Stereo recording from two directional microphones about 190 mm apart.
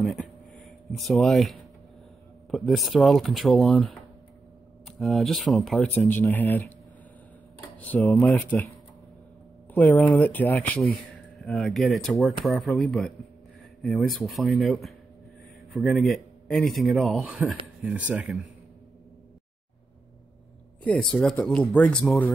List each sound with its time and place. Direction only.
0.0 s a sound: centre (ahead or behind)
2.5 s speech: centre (ahead or behind)
7.6 s speech: 10° left (ahead or behind)
9.8 s speech: 5° left (ahead or behind)
20.8 s speech: 5° left (ahead or behind)